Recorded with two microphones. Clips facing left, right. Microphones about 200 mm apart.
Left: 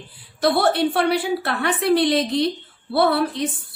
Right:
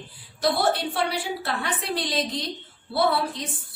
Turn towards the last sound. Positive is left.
turn(degrees=60)  # may be behind; listen again after turning